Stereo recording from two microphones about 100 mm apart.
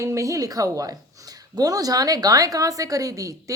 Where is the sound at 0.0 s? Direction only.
30° right (ahead or behind).